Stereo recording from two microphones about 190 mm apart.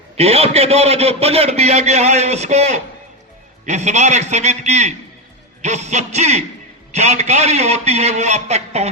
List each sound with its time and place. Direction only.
0.2 s a man's voice: 35° right (ahead or behind)